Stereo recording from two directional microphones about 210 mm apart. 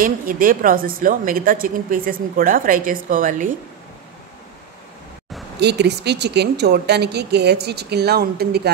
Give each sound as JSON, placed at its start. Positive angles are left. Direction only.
{"t": 0.0, "sound": "a woman's voice", "side_deg": -40}
{"t": 5.6, "sound": "a woman's voice", "side_deg": -55}